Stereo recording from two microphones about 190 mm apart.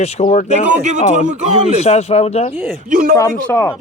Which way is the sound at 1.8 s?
35° left (ahead or behind).